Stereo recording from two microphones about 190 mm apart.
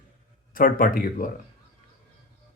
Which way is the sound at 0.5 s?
45° left (ahead or behind).